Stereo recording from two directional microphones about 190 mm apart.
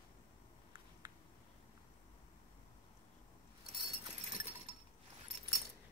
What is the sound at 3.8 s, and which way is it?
Keys jangling, 30° right (ahead or behind).